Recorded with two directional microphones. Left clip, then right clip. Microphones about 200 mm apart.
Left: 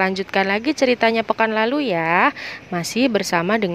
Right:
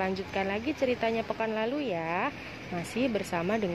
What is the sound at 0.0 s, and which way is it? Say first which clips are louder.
Speech: left 12 dB; 35° left (ahead or behind).